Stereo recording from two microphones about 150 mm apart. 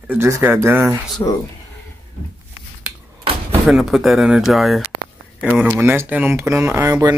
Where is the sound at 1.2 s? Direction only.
20° left (ahead or behind).